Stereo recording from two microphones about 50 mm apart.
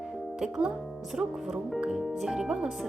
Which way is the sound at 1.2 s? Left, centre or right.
Right.